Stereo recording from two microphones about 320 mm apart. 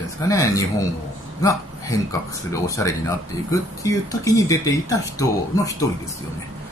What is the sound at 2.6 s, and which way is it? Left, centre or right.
Speech, centre.